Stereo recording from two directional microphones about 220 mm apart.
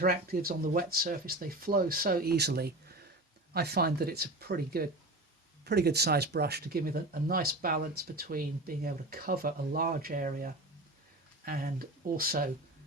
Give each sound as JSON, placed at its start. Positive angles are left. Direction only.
{"t": 0.0, "sound": "speech", "side_deg": -45}